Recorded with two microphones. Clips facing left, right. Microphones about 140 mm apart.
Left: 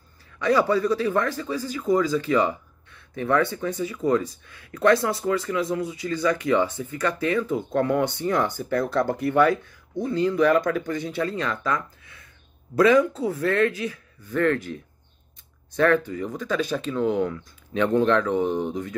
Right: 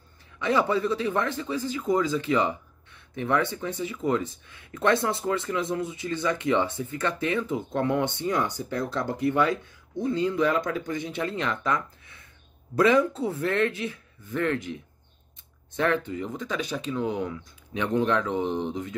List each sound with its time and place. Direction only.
0.4 s speech: 20° right (ahead or behind)
8.6 s speech: 60° left (ahead or behind)
9.5 s speech: 20° right (ahead or behind)